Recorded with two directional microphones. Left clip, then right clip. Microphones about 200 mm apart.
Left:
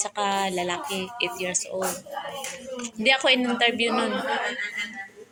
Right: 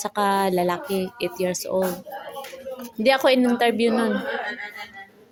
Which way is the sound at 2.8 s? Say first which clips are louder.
Right 3 dB; 35° right (ahead or behind).